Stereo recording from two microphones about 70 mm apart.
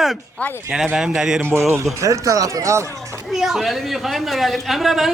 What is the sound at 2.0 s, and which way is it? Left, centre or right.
Speech, right.